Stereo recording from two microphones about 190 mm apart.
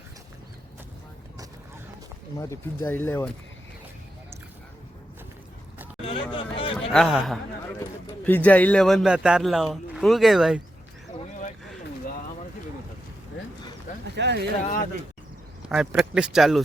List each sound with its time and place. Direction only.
2.8 s speech: 10° left (ahead or behind)
6.0 s hubbub: 30° left (ahead or behind)
6.3 s a sound: 30° left (ahead or behind)
6.9 s speech: centre (ahead or behind)
14.2 s speech: 65° right (ahead or behind)
15.6 s speech: 5° right (ahead or behind)